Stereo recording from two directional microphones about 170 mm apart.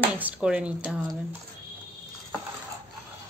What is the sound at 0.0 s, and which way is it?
Speech, 10° right (ahead or behind).